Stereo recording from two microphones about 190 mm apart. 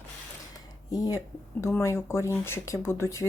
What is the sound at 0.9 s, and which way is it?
Speech, 20° left (ahead or behind).